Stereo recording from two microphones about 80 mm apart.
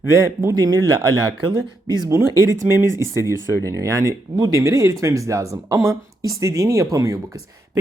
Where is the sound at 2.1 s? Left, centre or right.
Right.